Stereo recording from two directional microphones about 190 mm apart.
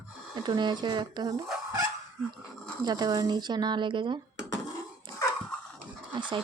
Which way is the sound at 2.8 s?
20° right (ahead or behind).